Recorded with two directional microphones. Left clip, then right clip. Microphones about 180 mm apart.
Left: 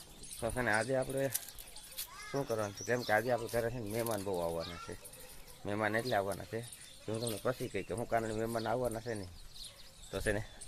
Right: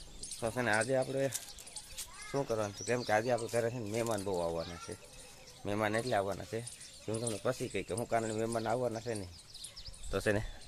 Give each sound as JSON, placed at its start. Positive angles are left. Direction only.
{"t": 0.3, "sound": "speech", "side_deg": -5}
{"t": 5.6, "sound": "speech", "side_deg": -10}
{"t": 10.1, "sound": "speech", "side_deg": -35}